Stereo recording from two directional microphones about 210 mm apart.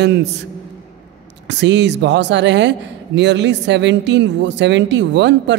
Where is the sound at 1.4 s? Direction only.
55° right (ahead or behind).